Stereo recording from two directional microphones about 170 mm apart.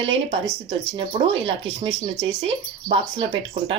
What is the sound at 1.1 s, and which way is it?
Speech, 35° right (ahead or behind).